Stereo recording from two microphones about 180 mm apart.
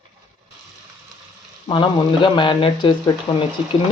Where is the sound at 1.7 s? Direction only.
25° left (ahead or behind).